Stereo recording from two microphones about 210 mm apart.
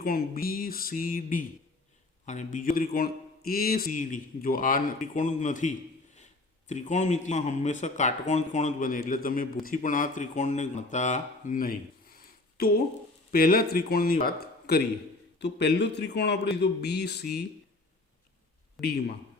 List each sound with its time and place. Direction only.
0.0 s a man's voice: 45° left (ahead or behind)
18.8 s a man's voice: 50° left (ahead or behind)